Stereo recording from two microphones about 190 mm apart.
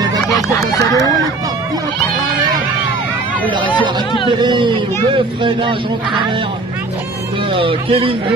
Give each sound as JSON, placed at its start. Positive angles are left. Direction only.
{"t": 0.4, "sound": "speech", "side_deg": 15}
{"t": 4.3, "sound": "speech", "side_deg": -25}
{"t": 7.5, "sound": "speech", "side_deg": -30}